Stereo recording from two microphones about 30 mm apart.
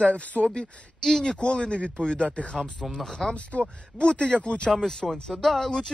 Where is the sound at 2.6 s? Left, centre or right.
Centre.